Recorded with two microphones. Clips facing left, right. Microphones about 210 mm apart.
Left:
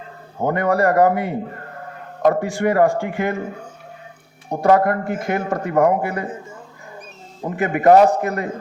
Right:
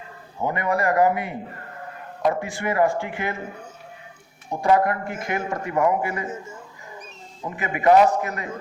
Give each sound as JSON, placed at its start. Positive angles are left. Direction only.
{"t": 0.3, "sound": "a man's voice", "side_deg": 50}
{"t": 2.2, "sound": "a man's voice", "side_deg": 45}
{"t": 4.5, "sound": "a man's voice", "side_deg": 50}
{"t": 7.4, "sound": "a man's voice", "side_deg": 50}